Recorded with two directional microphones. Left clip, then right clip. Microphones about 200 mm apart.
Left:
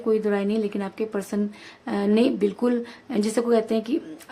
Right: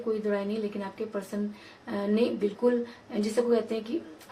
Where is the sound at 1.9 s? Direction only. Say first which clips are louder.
Left 6 dB; 45° left (ahead or behind).